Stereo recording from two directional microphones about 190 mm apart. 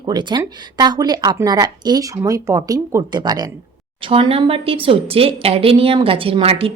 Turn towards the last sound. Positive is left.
turn(degrees=-30)  # may be behind; listen again after turning